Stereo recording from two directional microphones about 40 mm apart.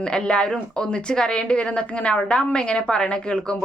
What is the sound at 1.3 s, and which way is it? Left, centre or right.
A woman's voice, left.